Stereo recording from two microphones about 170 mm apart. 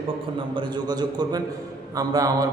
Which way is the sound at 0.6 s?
25° right (ahead or behind).